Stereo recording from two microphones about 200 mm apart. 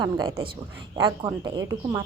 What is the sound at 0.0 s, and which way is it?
A woman's voice, 20° right (ahead or behind).